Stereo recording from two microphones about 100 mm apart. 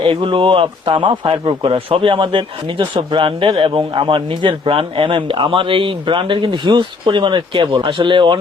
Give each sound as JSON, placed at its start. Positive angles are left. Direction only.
{"t": 0.0, "sound": "a man's voice", "side_deg": -60}